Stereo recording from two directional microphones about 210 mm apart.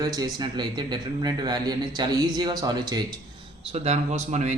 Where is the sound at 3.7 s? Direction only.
30° right (ahead or behind).